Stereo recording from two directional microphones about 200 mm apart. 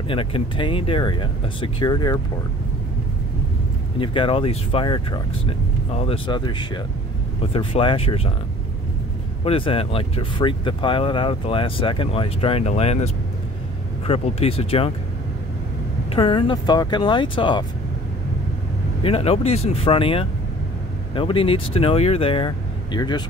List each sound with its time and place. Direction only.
0.1 s speech: 25° left (ahead or behind)
4.0 s speech: 25° left (ahead or behind)
9.4 s speech: 30° left (ahead or behind)
16.1 s speech: 25° left (ahead or behind)
19.0 s speech: 30° left (ahead or behind)